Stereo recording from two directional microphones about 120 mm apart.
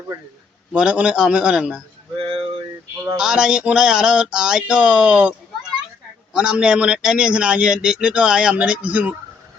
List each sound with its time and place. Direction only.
0.7 s a man's voice: 10° right (ahead or behind)
2.1 s a sound: 45° right (ahead or behind)
3.2 s a man's voice: 5° right (ahead or behind)
6.3 s a man's voice: 5° right (ahead or behind)